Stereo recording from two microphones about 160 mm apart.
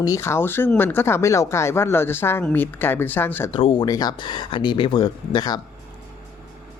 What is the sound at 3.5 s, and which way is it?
Speech, 30° left (ahead or behind).